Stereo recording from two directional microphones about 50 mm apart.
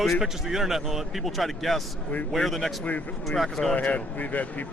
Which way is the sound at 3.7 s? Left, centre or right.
Left.